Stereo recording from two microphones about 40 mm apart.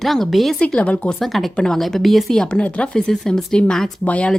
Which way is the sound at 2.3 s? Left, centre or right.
Centre.